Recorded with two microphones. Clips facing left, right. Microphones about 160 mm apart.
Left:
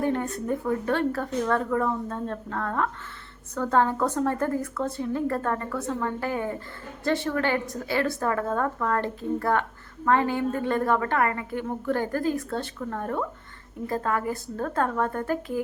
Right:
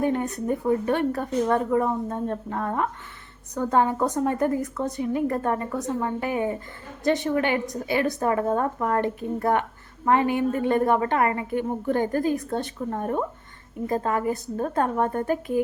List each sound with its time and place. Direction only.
0.0 s a woman's voice: 15° right (ahead or behind)